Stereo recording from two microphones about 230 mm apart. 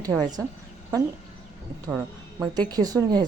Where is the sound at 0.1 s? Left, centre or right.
Centre.